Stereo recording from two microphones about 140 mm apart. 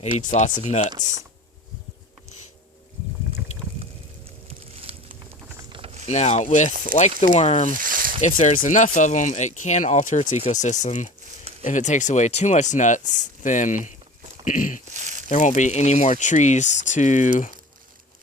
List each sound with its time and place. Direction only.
0.3 s speech: 60° left (ahead or behind)
3.5 s boat: 55° left (ahead or behind)
4.9 s a sound: 45° right (ahead or behind)
5.6 s mechanisms: 35° right (ahead or behind)
6.1 s speech: 55° left (ahead or behind)
7.7 s a sound: 75° right (ahead or behind)
8.2 s speech: 55° left (ahead or behind)
14.9 s crumpling: 60° right (ahead or behind)
15.3 s speech: 60° left (ahead or behind)